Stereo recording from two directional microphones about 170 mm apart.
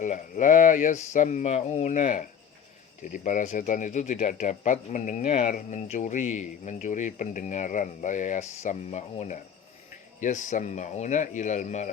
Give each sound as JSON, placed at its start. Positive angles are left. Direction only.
{"t": 0.0, "sound": "speech", "side_deg": 45}